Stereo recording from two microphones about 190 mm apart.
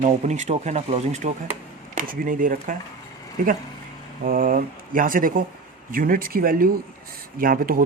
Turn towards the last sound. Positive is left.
turn(degrees=-50)  # may be behind; listen again after turning